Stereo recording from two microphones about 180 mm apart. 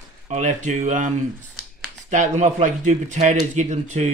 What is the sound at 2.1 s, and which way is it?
Speech, 40° right (ahead or behind).